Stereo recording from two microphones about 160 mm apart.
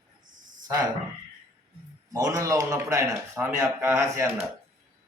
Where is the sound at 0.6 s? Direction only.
25° right (ahead or behind).